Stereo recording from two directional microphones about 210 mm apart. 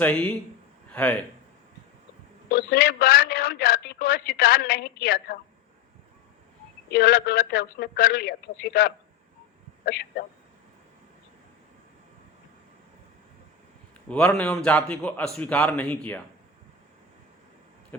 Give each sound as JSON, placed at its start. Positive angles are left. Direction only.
{"t": 0.0, "sound": "a man's voice", "side_deg": 5}
{"t": 2.5, "sound": "a sound", "side_deg": 45}
{"t": 6.9, "sound": "a man's voice", "side_deg": 45}
{"t": 14.1, "sound": "a man's voice", "side_deg": 5}